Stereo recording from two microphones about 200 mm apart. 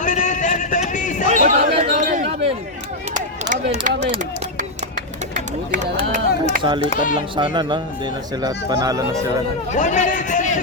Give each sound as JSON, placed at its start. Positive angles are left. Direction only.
{"t": 0.0, "sound": "a sound", "side_deg": 40}
{"t": 1.3, "sound": "chatter", "side_deg": -40}
{"t": 3.5, "sound": "speech", "side_deg": -35}
{"t": 5.3, "sound": "run", "side_deg": -40}
{"t": 6.4, "sound": "speech", "side_deg": -25}
{"t": 6.9, "sound": "a man's voice", "side_deg": 40}
{"t": 7.3, "sound": "speech", "side_deg": -25}
{"t": 9.7, "sound": "a man's voice", "side_deg": 40}